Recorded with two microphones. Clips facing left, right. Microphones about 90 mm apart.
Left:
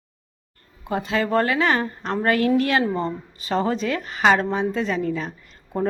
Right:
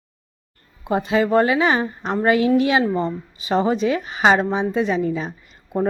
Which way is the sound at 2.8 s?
5° right (ahead or behind).